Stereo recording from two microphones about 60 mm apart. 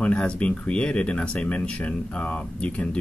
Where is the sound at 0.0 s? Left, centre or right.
Centre.